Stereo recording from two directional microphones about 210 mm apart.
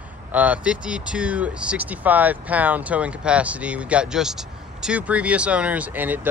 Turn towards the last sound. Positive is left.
turn(degrees=-10)  # may be behind; listen again after turning